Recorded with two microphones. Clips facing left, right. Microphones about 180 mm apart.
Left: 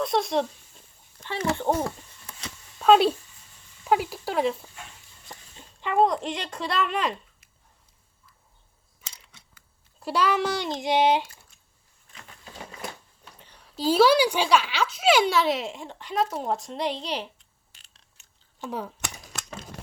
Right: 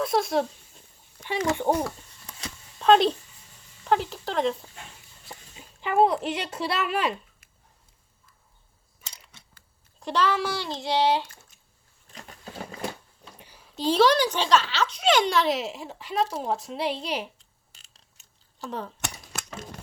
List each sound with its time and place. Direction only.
0.0 s a woman's voice: centre (ahead or behind)
1.2 s speech: 15° right (ahead or behind)
2.7 s speech: 5° left (ahead or behind)
5.3 s speech: 5° right (ahead or behind)
10.0 s speech: 10° left (ahead or behind)
13.4 s a woman's voice: 5° right (ahead or behind)
18.7 s speech: 10° left (ahead or behind)